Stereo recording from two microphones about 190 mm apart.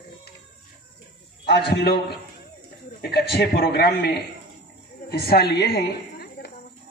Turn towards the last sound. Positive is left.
turn(degrees=55)  # may be behind; listen again after turning